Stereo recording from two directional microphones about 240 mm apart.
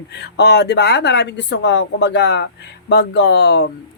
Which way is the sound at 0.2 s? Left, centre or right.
Left.